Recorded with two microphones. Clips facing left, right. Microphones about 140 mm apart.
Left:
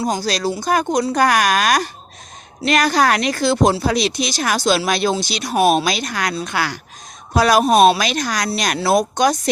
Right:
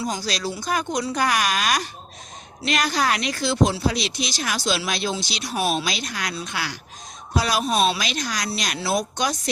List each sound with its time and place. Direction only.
0.1 s speech: 40° left (ahead or behind)